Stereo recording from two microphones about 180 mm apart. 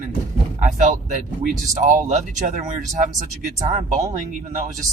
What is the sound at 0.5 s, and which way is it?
Speech, 45° right (ahead or behind).